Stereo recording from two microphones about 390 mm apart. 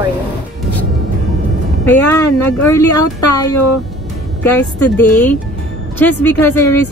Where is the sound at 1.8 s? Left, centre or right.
Centre.